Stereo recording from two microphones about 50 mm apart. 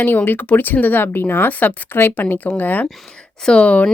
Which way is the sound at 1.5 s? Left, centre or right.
Left.